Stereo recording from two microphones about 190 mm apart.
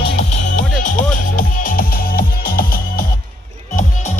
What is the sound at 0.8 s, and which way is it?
Music, 45° left (ahead or behind).